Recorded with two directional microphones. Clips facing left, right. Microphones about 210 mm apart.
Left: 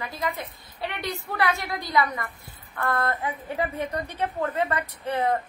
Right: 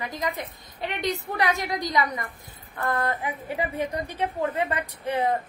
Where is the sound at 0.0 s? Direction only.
15° right (ahead or behind).